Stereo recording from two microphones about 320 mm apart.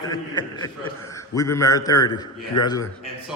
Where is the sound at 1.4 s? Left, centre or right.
Centre.